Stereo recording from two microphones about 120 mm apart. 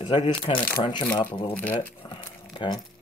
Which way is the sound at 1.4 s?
15° left (ahead or behind).